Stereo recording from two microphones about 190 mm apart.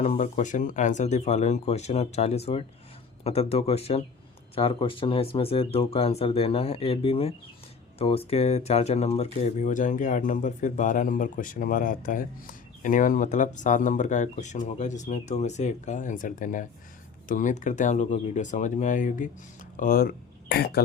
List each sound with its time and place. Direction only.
0.0 s speech: 40° left (ahead or behind); by 20.8 s 55° left (ahead or behind)